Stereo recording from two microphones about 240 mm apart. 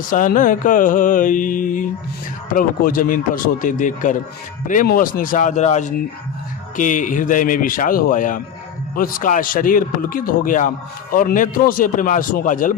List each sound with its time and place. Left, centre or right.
0.1 s music: left